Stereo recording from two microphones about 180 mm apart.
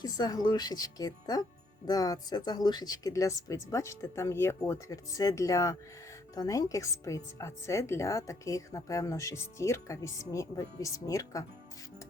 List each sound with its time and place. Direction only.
0.0 s speech: 20° left (ahead or behind)